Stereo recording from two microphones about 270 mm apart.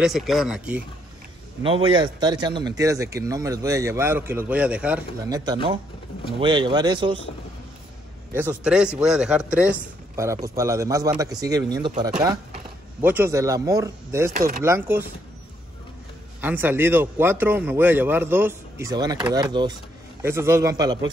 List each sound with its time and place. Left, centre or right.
0.0 s speech: centre
1.6 s speech: centre
8.3 s speech: centre
13.0 s speech: centre
14.3 s speech: right
14.6 s speech: centre
16.3 s speech: centre